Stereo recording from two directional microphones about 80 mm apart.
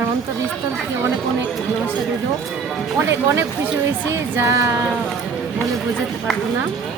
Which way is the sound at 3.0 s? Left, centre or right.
Right.